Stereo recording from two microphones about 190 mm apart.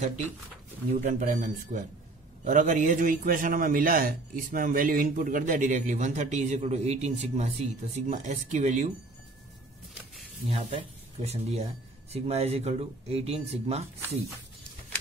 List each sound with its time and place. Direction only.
1.0 s a man's voice: 45° right (ahead or behind)
9.9 s a sound: centre (ahead or behind)
10.5 s speech: 30° right (ahead or behind)